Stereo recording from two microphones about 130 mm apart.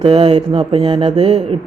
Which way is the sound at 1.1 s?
55° right (ahead or behind).